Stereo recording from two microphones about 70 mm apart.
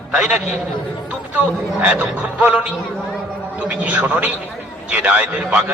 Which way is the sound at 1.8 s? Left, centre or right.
Right.